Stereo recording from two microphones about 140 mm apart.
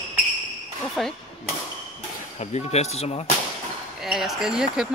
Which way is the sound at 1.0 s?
Centre (ahead or behind).